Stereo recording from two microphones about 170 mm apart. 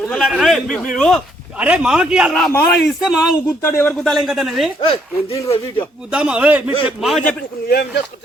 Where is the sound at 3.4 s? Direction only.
15° left (ahead or behind); by 4.7 s centre (ahead or behind).